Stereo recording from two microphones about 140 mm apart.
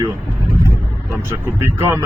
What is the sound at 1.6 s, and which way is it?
Speech, 15° right (ahead or behind).